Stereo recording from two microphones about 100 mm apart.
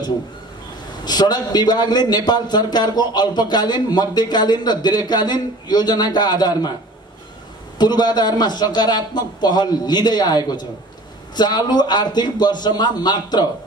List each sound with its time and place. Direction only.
1.0 s a man's voice: 45° left (ahead or behind)
7.8 s a man's voice: 45° left (ahead or behind)